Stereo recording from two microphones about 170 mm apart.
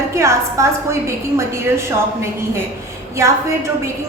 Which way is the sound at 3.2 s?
15° right (ahead or behind).